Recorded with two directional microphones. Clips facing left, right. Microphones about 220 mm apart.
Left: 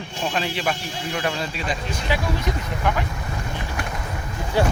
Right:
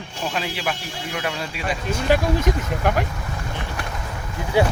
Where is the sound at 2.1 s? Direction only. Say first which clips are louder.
Right 6 dB; 45° right (ahead or behind).